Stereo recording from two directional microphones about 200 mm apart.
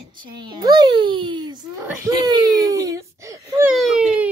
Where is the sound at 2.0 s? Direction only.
20° right (ahead or behind).